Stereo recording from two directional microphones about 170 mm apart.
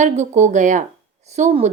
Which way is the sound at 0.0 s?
45° right (ahead or behind).